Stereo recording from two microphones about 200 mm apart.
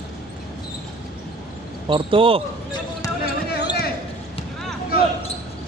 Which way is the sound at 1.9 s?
25° right (ahead or behind).